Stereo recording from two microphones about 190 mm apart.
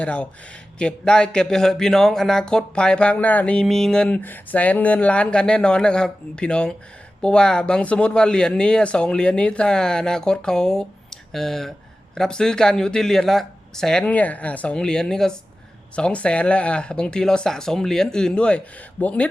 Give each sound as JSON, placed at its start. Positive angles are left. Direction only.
{"t": 0.0, "sound": "speech", "side_deg": 5}